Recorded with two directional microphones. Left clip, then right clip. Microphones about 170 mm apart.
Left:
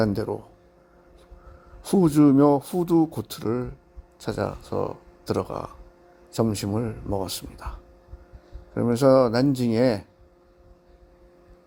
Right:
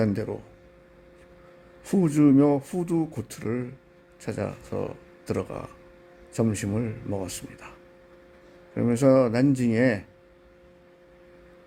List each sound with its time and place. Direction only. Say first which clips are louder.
0.0 s speech: left 3 dB; 15° left (ahead or behind)
1.8 s speech: left 3 dB; 20° left (ahead or behind)
8.7 s speech: left 2 dB; 15° left (ahead or behind)